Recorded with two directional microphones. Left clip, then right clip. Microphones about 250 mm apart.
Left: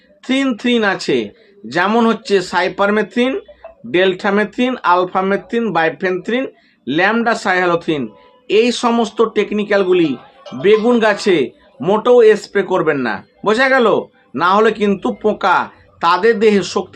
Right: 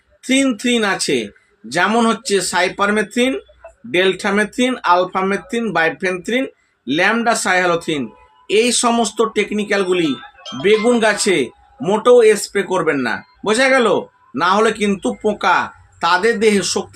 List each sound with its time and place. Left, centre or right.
0.2 s speech: centre